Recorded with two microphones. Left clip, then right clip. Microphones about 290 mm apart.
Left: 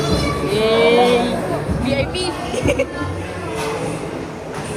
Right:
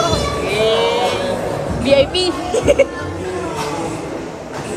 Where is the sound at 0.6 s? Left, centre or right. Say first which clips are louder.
Left 2 dB; centre.